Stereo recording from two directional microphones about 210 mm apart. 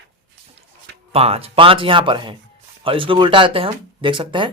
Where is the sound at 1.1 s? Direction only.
30° right (ahead or behind).